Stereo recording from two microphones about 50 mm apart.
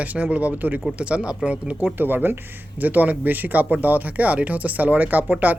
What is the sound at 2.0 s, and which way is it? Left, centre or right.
Speech, right.